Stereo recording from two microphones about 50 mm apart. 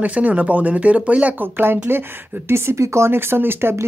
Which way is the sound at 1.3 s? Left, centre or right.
Right.